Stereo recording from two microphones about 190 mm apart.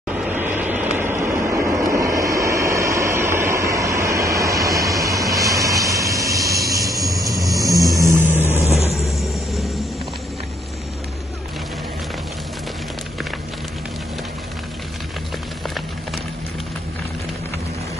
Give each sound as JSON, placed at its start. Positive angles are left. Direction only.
{"t": 0.1, "sound": "vehicle", "side_deg": -5}
{"t": 8.9, "sound": "vehicle", "side_deg": 0}